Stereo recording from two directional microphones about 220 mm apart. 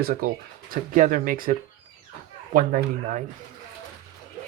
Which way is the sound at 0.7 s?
35° right (ahead or behind).